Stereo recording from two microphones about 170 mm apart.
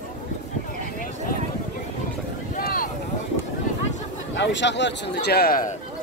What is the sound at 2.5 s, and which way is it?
Boat, 60° left (ahead or behind).